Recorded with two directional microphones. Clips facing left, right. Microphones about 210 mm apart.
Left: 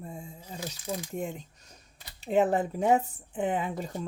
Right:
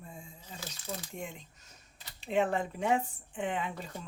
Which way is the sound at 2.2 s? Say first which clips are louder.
Left 5 dB; 40° left (ahead or behind).